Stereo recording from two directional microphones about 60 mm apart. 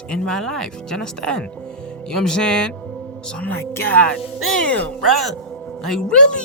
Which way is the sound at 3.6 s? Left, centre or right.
Left.